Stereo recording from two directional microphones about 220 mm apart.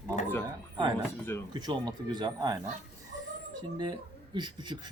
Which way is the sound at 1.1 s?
10° left (ahead or behind).